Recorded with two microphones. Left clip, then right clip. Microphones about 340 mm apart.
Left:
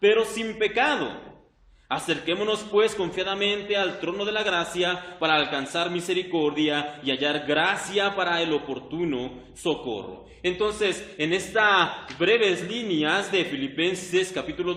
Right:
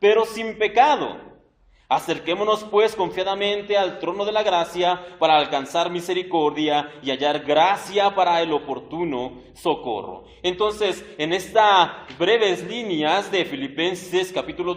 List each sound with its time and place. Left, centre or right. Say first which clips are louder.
0.0 s a man's voice: right 3 dB; centre
9.6 s a man's voice: right 4 dB; right
10.4 s a man's voice: right 3 dB; centre